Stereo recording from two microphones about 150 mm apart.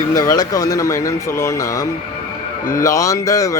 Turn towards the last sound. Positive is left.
turn(degrees=20)  # may be behind; listen again after turning